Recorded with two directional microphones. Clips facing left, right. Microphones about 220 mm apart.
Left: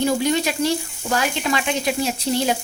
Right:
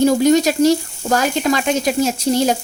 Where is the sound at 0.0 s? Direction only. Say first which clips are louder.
Right 7 dB; 45° right (ahead or behind).